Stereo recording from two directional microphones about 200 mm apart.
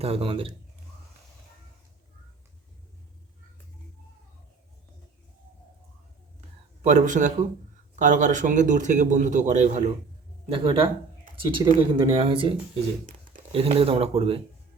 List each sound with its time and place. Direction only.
0.0 s speech: 30° right (ahead or behind)
6.8 s a man's voice: 35° right (ahead or behind)